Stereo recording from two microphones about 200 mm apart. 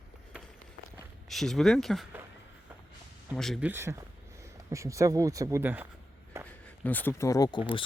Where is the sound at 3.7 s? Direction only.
15° right (ahead or behind).